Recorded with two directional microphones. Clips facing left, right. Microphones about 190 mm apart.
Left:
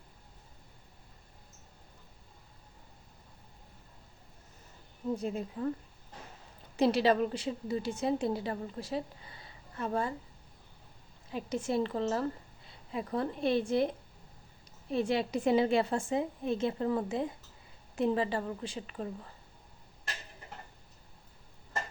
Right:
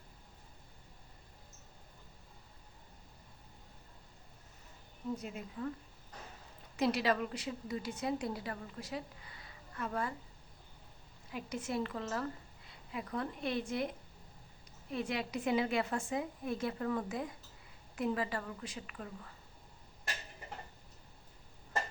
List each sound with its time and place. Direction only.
5.1 s a woman's voice: 30° left (ahead or behind)
6.7 s a woman's voice: 30° left (ahead or behind)
11.3 s a woman's voice: 30° left (ahead or behind)